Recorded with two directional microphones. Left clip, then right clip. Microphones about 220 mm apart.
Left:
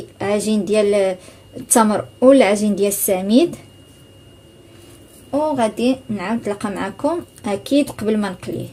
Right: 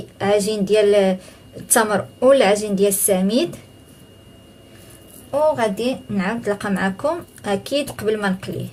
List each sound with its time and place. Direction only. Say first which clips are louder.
0.2 s a woman's voice: right 2 dB; 15° left (ahead or behind)
5.3 s a woman's voice: right 1 dB; 15° left (ahead or behind)